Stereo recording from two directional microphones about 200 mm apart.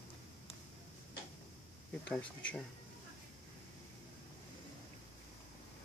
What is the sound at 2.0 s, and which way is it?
Speech, 5° left (ahead or behind).